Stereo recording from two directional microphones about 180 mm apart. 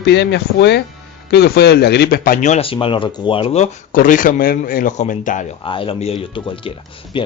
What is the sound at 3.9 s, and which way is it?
Speech, 45° left (ahead or behind).